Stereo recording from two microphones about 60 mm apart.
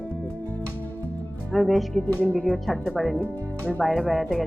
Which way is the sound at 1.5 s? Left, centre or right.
Centre.